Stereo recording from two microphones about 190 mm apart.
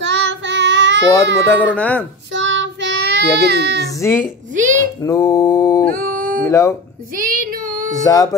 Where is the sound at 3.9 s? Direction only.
15° left (ahead or behind).